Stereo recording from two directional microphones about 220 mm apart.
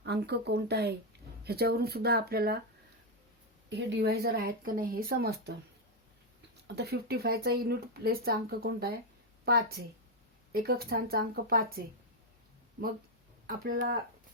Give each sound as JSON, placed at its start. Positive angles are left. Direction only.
{"t": 0.0, "sound": "speech", "side_deg": -50}
{"t": 3.7, "sound": "speech", "side_deg": -50}
{"t": 6.7, "sound": "a woman's voice", "side_deg": -45}
{"t": 13.7, "sound": "speech", "side_deg": -40}